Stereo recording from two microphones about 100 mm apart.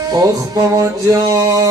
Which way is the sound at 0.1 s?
40° right (ahead or behind).